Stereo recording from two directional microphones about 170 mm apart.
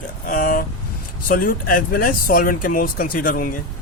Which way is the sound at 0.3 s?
55° left (ahead or behind).